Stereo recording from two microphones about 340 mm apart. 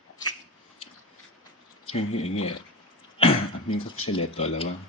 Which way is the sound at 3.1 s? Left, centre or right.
Centre.